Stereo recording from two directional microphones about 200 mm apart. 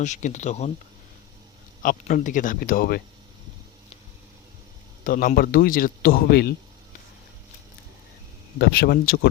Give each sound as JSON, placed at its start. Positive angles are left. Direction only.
{"t": 0.0, "sound": "speech", "side_deg": 35}
{"t": 1.8, "sound": "a man's voice", "side_deg": 45}
{"t": 5.0, "sound": "a man's voice", "side_deg": 45}
{"t": 8.5, "sound": "a man's voice", "side_deg": 50}